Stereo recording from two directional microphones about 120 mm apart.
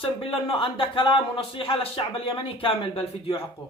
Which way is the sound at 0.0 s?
50° left (ahead or behind).